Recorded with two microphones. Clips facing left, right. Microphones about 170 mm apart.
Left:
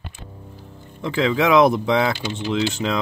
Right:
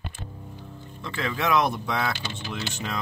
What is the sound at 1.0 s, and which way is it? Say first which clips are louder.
Speech: left 9 dB; 90° left.